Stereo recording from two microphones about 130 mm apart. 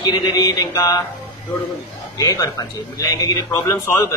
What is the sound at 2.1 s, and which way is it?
A man's voice, 25° left (ahead or behind).